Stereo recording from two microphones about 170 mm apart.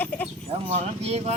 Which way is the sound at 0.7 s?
40° right (ahead or behind).